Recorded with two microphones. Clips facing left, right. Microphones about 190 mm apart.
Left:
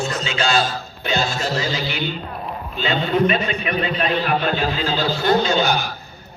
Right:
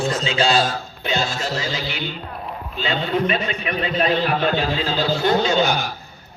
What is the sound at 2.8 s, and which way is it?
A man's voice, 35° right (ahead or behind).